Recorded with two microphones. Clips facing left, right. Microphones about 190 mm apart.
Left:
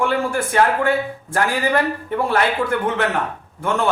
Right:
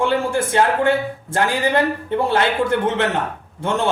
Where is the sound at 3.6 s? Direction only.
25° right (ahead or behind).